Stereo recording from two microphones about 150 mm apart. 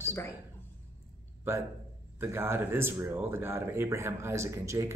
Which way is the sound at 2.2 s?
15° right (ahead or behind).